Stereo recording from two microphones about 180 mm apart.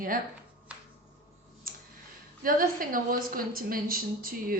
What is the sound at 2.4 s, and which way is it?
A woman's voice, 50° right (ahead or behind).